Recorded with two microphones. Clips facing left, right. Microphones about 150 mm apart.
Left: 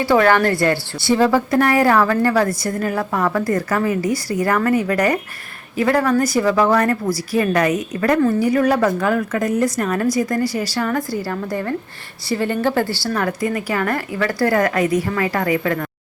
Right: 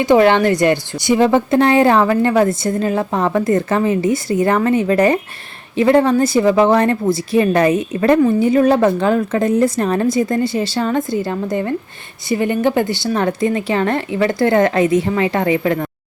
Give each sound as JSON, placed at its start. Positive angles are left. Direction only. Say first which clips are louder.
{"t": 0.0, "sound": "a woman's voice", "louder": "right 3 dB", "side_deg": -20}